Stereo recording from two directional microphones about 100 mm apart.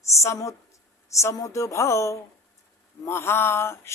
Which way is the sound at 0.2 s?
30° left (ahead or behind).